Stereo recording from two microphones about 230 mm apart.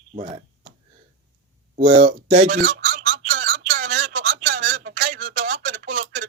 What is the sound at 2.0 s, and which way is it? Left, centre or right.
Speech, right.